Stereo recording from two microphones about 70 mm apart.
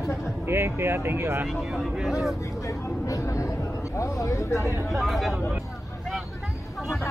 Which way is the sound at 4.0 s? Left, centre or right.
Left.